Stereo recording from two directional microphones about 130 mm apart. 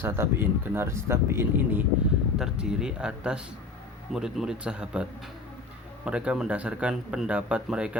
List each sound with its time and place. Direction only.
0.0 s speech: 20° right (ahead or behind)
2.4 s speech: 5° right (ahead or behind)
6.1 s speech: 10° right (ahead or behind)